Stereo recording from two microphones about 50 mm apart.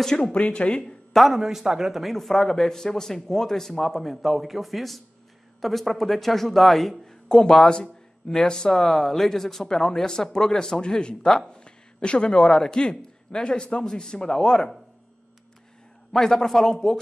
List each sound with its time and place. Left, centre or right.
0.0 s a man's voice: centre
0.3 s speech: left
1.1 s a man's voice: centre
2.1 s a man's voice: centre
16.1 s a man's voice: centre